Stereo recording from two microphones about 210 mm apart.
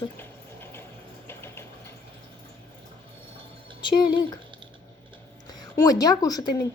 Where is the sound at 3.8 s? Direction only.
20° left (ahead or behind).